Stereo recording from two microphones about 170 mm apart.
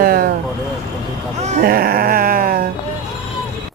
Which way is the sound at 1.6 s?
60° right (ahead or behind).